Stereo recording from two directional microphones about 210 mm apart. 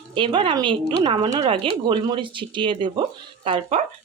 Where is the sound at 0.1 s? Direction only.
25° right (ahead or behind).